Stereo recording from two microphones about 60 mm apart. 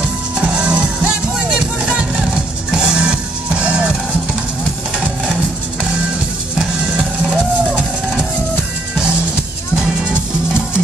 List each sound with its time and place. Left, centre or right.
0.4 s music: centre
1.9 s music: centre